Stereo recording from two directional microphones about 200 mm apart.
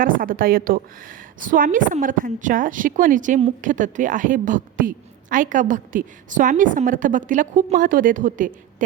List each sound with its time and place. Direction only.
0.0 s a woman's voice: 45° right (ahead or behind)